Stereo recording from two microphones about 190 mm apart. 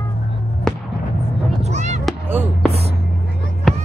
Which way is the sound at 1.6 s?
35° right (ahead or behind).